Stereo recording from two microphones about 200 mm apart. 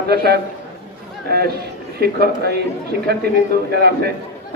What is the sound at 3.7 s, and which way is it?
Speech, 55° right (ahead or behind).